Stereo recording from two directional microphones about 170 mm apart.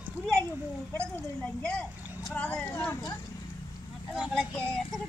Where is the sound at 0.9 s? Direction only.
5° left (ahead or behind).